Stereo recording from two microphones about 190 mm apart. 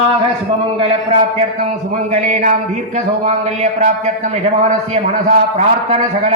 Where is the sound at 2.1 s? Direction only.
40° right (ahead or behind).